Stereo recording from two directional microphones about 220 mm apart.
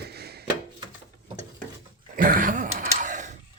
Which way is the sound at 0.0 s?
45° right (ahead or behind).